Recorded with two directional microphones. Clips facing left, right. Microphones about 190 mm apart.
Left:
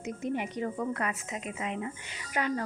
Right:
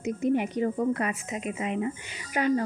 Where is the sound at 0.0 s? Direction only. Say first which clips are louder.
Right 7 dB; 15° right (ahead or behind).